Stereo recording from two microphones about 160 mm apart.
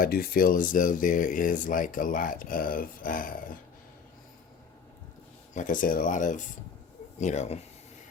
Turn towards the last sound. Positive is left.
turn(degrees=45)  # may be behind; listen again after turning